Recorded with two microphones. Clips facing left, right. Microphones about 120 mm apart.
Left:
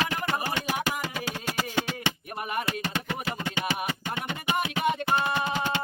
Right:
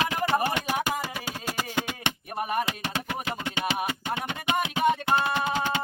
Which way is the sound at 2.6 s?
15° right (ahead or behind).